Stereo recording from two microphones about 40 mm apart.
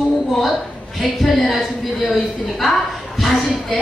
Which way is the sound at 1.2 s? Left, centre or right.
Centre.